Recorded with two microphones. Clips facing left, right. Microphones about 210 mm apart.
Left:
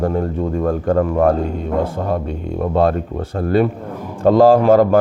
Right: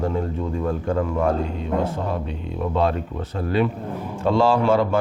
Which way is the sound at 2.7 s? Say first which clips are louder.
Left 6 dB; 50° left (ahead or behind).